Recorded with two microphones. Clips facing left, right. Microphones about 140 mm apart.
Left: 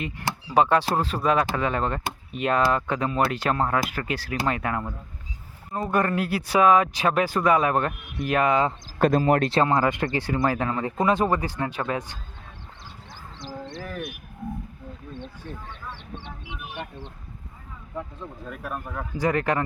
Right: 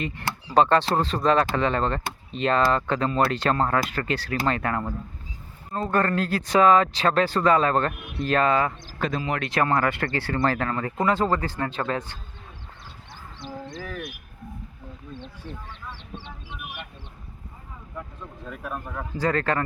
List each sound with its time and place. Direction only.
0.0 s speech: 10° left (ahead or behind)
9.0 s speech: 50° left (ahead or behind)
9.6 s speech: 15° left (ahead or behind)
18.4 s speech: 5° left (ahead or behind)
19.1 s speech: 15° left (ahead or behind)